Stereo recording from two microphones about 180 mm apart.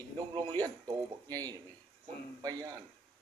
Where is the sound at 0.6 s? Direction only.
20° right (ahead or behind).